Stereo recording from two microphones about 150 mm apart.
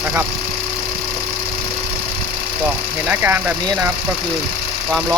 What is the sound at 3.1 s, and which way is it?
Speech, 15° right (ahead or behind).